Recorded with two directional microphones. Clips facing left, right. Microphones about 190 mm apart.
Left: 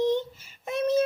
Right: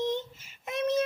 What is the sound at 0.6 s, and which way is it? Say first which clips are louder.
Child singing: left 3 dB; 35° left (ahead or behind).